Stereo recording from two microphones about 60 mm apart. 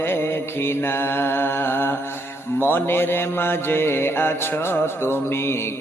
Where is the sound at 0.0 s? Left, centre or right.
Left.